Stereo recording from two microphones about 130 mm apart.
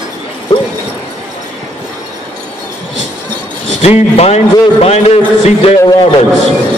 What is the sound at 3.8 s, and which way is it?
A man's voice, 55° left (ahead or behind).